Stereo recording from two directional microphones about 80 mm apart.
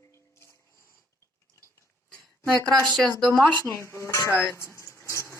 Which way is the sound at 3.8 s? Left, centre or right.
Left.